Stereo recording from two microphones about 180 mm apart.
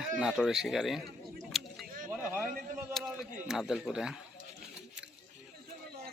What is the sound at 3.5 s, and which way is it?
Speech, centre (ahead or behind).